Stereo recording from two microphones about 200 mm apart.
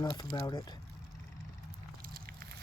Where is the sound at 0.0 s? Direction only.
20° left (ahead or behind).